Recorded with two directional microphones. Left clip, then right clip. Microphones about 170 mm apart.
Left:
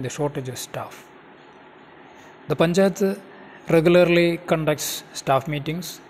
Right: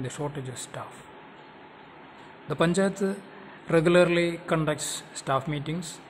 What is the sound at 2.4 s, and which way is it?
A man's voice, 20° left (ahead or behind).